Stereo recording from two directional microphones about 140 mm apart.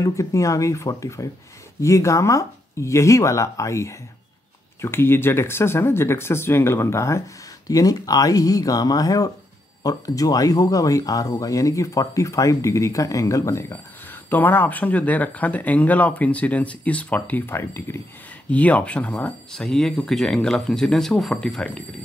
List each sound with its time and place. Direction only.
0.0 s speech: 20° left (ahead or behind); by 21.8 s 5° left (ahead or behind)